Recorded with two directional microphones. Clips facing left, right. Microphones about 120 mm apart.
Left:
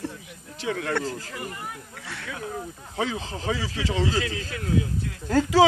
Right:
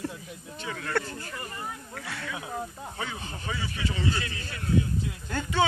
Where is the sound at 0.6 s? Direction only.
75° left (ahead or behind).